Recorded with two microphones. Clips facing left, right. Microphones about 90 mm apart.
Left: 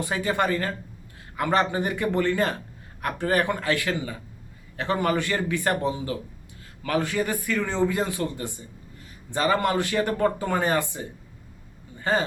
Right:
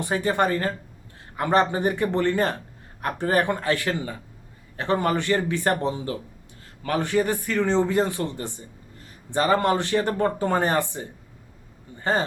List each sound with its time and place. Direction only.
0.1 s a man's voice: 25° right (ahead or behind)
5.1 s a man's voice: 25° right (ahead or behind)
5.6 s a man's voice: 35° right (ahead or behind)
11.9 s a sound: 30° right (ahead or behind)